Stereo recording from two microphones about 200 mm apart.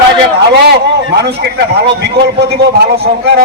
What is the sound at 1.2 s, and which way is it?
A man's voice, 55° right (ahead or behind).